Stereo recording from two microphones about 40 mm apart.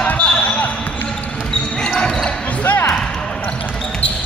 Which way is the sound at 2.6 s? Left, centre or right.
Left.